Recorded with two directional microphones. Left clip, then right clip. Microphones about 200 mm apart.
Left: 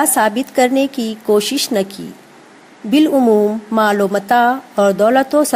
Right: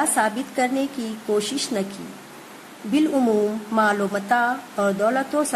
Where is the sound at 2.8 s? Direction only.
35° left (ahead or behind).